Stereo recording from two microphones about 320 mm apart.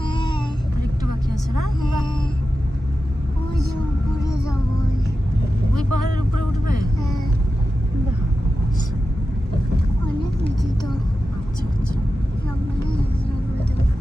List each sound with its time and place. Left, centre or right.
0.0 s vehicle: centre
4.2 s music: centre
5.9 s vehicle: right